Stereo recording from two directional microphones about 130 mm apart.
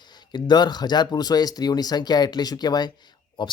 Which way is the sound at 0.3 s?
35° left (ahead or behind).